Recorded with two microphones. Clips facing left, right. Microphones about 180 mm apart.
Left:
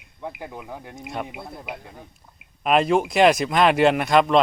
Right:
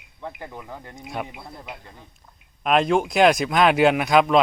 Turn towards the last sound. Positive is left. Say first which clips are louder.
# even
turn(degrees=0)  # may be behind; listen again after turning